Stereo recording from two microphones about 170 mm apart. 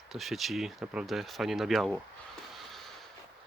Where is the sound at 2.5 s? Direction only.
Centre (ahead or behind).